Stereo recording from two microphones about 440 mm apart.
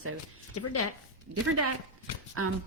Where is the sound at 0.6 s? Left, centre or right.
Left.